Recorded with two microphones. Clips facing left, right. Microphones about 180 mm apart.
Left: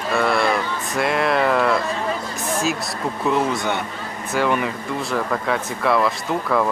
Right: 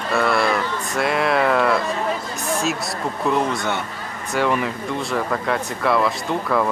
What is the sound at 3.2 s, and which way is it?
Speech, centre (ahead or behind).